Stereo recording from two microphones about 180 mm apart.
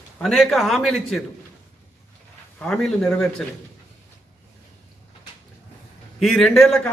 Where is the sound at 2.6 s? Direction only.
5° left (ahead or behind).